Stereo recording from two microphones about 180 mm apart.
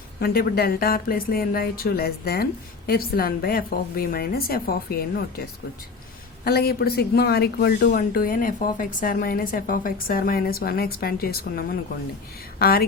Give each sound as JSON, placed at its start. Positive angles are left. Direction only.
{"t": 0.2, "sound": "speech", "side_deg": 60}
{"t": 6.4, "sound": "speech", "side_deg": 60}